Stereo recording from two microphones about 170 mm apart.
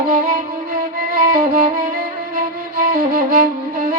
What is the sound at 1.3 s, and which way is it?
Music, 55° right (ahead or behind).